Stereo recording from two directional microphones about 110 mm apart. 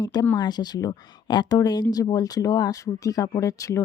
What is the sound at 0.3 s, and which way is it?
Speech, 40° left (ahead or behind).